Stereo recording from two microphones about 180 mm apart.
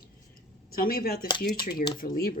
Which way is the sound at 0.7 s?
55° left (ahead or behind).